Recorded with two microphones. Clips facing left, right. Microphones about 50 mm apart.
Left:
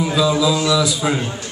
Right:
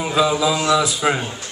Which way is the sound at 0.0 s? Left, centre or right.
Right.